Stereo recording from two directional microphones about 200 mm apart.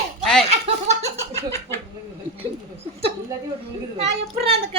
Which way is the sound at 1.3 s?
15° left (ahead or behind).